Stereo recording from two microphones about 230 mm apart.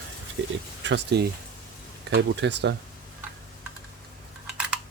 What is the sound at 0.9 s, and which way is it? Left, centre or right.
Speech, right.